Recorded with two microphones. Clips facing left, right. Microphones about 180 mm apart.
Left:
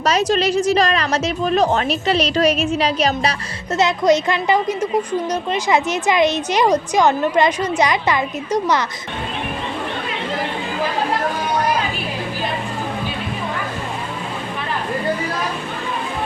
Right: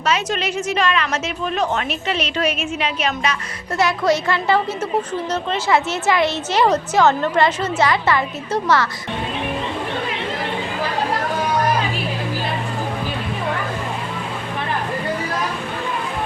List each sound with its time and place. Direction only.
0.0 s a woman's voice: 40° left (ahead or behind)
3.8 s a woman's voice: 20° left (ahead or behind)